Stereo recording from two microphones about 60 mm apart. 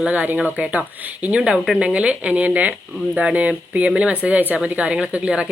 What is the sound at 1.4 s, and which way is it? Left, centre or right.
Speech, centre.